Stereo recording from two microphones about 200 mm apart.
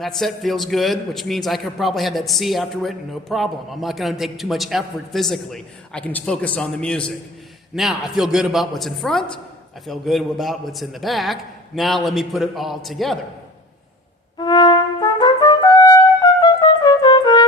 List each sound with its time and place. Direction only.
0.0 s a man's voice: centre (ahead or behind)
14.3 s trumpet: 20° left (ahead or behind)